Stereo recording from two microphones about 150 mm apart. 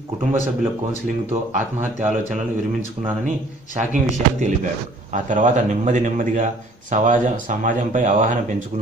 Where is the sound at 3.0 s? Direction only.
50° right (ahead or behind).